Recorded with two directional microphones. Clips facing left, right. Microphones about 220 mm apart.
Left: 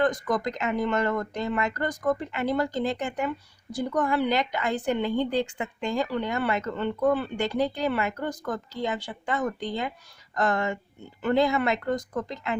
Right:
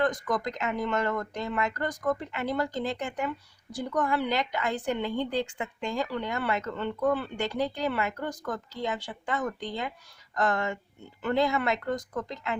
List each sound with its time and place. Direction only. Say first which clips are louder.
0.0 s a woman's voice: left 3 dB; 25° left (ahead or behind)